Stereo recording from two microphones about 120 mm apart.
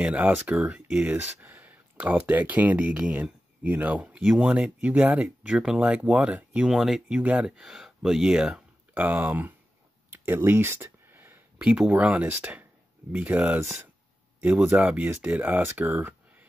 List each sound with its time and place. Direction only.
0.0 s speech: 10° right (ahead or behind)